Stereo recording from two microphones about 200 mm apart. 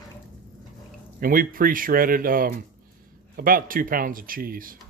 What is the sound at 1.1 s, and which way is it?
Speech, 45° right (ahead or behind).